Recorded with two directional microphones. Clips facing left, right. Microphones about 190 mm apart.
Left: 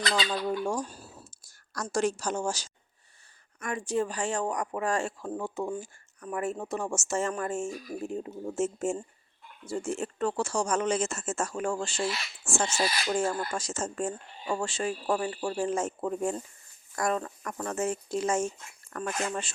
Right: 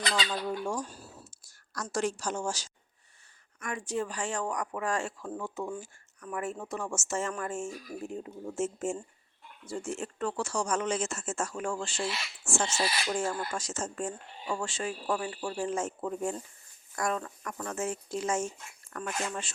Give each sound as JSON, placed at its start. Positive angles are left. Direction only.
{"t": 0.1, "sound": "a woman's voice", "side_deg": 40}